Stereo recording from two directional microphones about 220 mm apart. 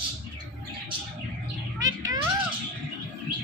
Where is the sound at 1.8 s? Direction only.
15° right (ahead or behind).